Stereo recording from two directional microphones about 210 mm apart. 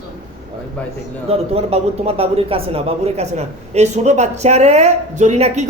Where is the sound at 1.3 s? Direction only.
30° right (ahead or behind).